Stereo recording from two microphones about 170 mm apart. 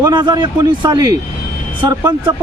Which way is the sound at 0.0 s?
25° right (ahead or behind).